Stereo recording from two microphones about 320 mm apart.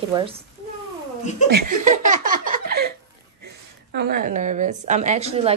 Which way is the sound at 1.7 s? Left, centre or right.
Right.